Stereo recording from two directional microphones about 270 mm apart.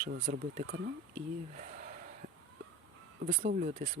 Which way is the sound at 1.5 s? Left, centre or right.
Right.